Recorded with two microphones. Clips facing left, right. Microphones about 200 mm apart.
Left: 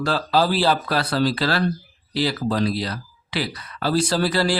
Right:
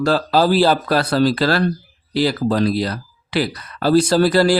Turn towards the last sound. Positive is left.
turn(degrees=-45)  # may be behind; listen again after turning